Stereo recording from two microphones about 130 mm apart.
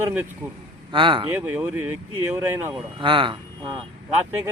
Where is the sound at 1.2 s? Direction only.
15° right (ahead or behind).